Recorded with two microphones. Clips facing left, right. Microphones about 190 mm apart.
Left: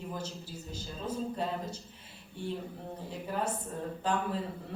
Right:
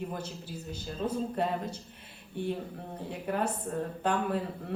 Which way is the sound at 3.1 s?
60° right (ahead or behind).